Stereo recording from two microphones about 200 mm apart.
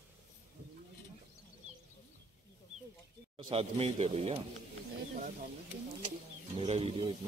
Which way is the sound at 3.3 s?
30° right (ahead or behind).